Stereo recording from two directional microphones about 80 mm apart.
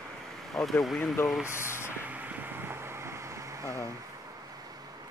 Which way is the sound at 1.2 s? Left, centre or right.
Left.